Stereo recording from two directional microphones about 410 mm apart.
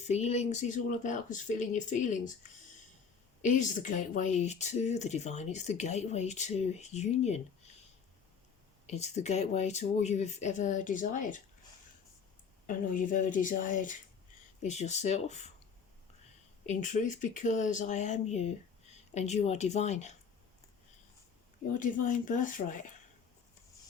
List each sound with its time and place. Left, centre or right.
0.0 s speech: centre
3.4 s speech: centre
8.9 s speech: centre
12.6 s speech: centre
16.6 s speech: centre
21.7 s speech: centre